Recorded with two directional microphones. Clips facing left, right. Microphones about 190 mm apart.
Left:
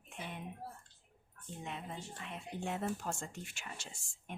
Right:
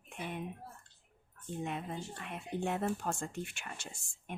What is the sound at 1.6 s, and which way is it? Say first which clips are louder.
Speech: right 3 dB; 60° right (ahead or behind).